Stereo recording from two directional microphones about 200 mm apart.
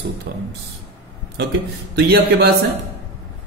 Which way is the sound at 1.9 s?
55° right (ahead or behind).